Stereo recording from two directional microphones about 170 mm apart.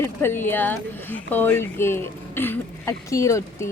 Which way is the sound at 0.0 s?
15° left (ahead or behind).